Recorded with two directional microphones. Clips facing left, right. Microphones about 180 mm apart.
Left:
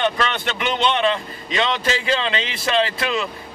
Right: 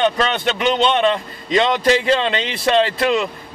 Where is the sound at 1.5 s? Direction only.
35° right (ahead or behind).